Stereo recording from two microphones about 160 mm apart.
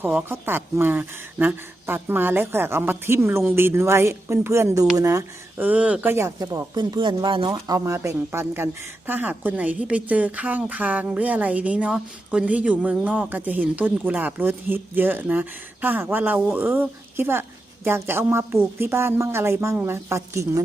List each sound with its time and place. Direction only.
0.0 s speech: 10° right (ahead or behind)